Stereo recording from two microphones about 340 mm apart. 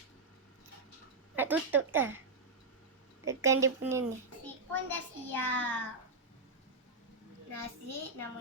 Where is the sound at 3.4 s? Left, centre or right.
Centre.